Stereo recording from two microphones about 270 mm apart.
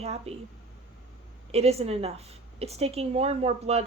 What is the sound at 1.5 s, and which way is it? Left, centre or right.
A woman's voice, right.